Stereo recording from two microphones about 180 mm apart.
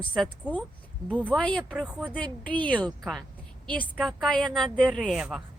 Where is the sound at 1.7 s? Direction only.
5° right (ahead or behind).